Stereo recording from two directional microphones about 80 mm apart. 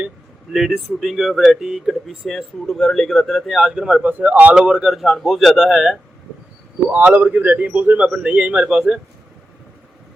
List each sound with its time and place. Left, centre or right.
0.5 s speech: centre
4.5 s speech: centre
6.9 s speech: right